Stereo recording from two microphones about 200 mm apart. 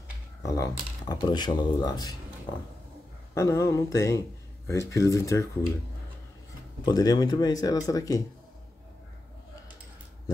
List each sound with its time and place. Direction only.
0.4 s speech: 15° left (ahead or behind)
3.3 s speech: 15° left (ahead or behind)
6.8 s speech: 20° left (ahead or behind)